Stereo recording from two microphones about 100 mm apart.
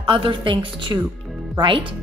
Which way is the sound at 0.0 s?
55° right (ahead or behind).